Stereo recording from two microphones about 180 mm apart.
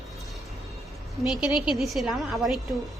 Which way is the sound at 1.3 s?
5° right (ahead or behind).